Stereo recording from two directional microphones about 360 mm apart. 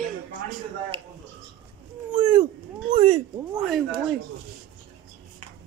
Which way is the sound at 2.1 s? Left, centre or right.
Centre.